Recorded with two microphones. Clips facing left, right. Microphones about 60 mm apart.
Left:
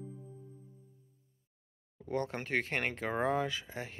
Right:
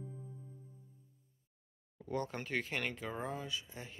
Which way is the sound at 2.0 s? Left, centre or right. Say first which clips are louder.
Left 3 dB; left.